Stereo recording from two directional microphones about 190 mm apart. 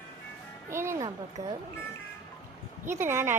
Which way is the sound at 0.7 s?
15° right (ahead or behind).